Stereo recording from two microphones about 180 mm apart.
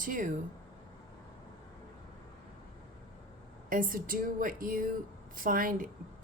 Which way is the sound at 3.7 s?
50° right (ahead or behind).